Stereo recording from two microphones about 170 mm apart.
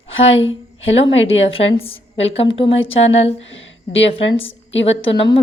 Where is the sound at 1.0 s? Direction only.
35° left (ahead or behind).